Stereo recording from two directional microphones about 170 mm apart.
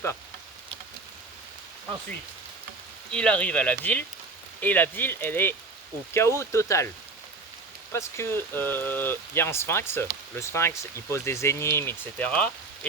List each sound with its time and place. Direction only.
3.1 s speech: 5° left (ahead or behind)
7.9 s speech: 15° left (ahead or behind)